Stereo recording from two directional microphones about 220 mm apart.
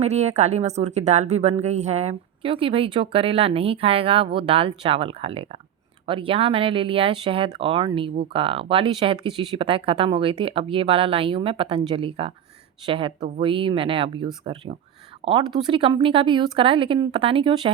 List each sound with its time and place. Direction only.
0.0 s speech: 30° right (ahead or behind)